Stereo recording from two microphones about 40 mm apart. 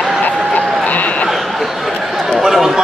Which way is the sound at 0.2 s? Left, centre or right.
Left.